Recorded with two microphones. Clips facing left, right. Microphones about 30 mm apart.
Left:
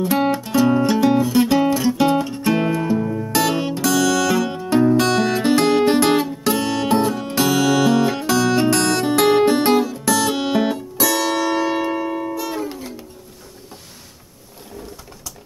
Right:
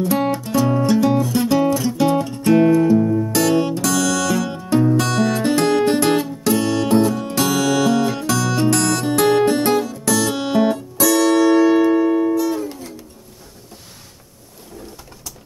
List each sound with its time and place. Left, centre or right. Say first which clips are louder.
0.0 s music: even; centre